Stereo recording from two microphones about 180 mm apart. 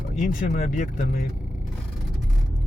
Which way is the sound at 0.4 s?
45° left (ahead or behind).